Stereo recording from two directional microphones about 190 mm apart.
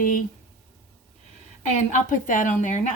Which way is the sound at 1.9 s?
40° left (ahead or behind).